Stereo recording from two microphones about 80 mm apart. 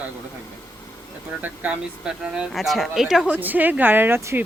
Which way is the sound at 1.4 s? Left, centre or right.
Centre.